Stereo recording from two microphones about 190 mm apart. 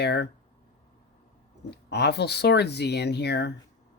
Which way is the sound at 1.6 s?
60° left (ahead or behind).